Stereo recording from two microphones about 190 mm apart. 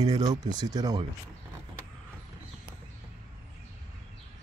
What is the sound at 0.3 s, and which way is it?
Speech, 20° right (ahead or behind).